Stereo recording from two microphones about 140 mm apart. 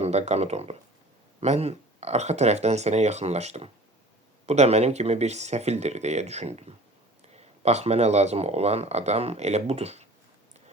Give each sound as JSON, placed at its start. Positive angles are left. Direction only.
{"t": 0.0, "sound": "speech", "side_deg": -50}